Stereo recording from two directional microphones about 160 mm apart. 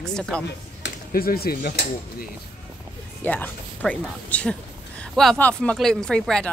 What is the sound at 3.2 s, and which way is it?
Speech, 10° left (ahead or behind).